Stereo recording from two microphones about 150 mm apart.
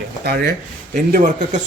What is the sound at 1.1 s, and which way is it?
Speech, 60° right (ahead or behind).